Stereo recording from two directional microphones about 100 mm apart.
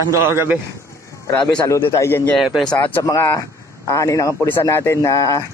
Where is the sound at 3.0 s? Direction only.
35° left (ahead or behind).